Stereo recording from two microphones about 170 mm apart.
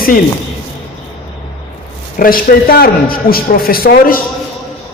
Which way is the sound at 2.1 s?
55° left (ahead or behind).